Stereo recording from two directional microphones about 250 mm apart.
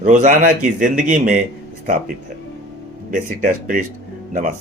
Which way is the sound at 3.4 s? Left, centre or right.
Right.